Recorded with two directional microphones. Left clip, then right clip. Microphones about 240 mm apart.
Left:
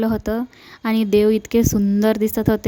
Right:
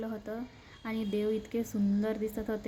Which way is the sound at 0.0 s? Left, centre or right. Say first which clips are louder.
Left 17 dB; left.